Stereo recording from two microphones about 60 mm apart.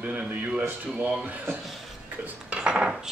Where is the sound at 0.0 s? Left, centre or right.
Right.